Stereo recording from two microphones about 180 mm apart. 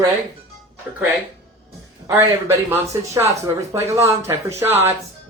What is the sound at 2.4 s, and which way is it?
Speech, 15° right (ahead or behind).